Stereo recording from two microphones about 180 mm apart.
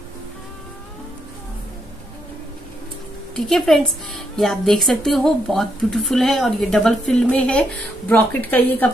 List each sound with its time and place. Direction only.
3.3 s a woman's voice: centre (ahead or behind)